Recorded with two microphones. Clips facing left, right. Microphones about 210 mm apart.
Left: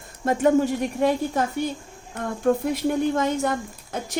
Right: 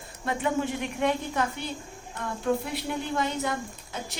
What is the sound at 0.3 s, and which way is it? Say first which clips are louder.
Speech: left 8 dB; 45° left (ahead or behind).